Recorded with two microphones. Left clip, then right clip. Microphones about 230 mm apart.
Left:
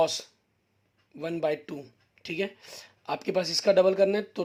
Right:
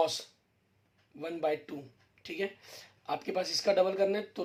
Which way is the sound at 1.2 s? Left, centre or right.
Left.